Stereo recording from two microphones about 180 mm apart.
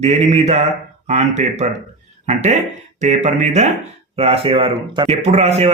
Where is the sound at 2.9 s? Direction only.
40° right (ahead or behind).